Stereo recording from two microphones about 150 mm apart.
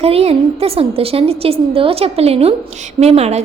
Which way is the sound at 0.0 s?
40° right (ahead or behind).